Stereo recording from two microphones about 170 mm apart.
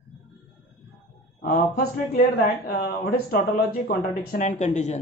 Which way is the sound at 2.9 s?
60° left (ahead or behind).